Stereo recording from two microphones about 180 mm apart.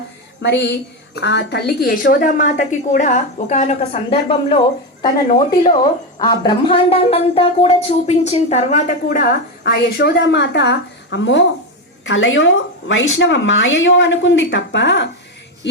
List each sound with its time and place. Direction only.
0.4 s a woman's voice: 75° left (ahead or behind); by 9.2 s 45° left (ahead or behind)
9.6 s a woman's voice: 65° left (ahead or behind)